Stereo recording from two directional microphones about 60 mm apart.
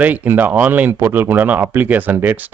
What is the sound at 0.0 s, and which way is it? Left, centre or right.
Speech, right.